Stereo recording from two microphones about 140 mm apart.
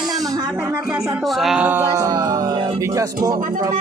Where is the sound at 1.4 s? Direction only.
5° right (ahead or behind).